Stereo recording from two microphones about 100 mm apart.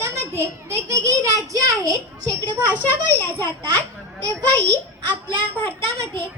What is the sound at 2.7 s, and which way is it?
Speech, 25° left (ahead or behind).